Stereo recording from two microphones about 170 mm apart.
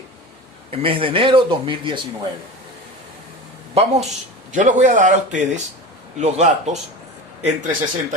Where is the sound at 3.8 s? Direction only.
35° right (ahead or behind).